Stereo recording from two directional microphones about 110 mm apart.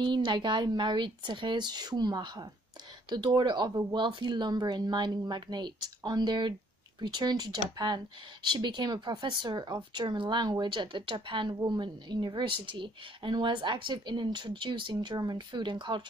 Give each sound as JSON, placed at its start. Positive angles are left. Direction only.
{"t": 0.0, "sound": "speech", "side_deg": -45}